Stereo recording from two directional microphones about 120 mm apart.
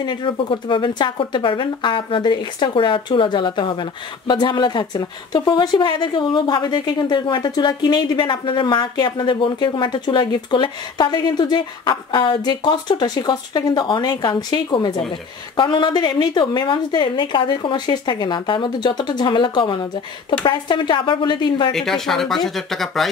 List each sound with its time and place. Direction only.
0.0 s speech: 40° left (ahead or behind)
21.7 s speech: 5° left (ahead or behind)